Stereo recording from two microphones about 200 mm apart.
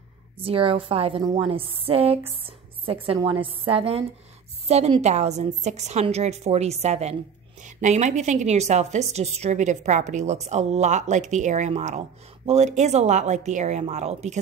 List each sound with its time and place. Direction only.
0.4 s a woman's voice: 25° right (ahead or behind)